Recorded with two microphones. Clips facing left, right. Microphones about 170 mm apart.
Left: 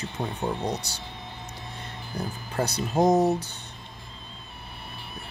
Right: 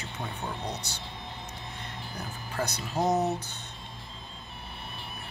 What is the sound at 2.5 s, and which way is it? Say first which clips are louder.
Speech: left 5 dB; 35° left (ahead or behind).